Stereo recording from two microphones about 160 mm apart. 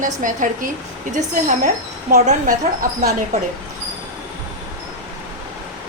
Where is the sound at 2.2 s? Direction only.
50° right (ahead or behind).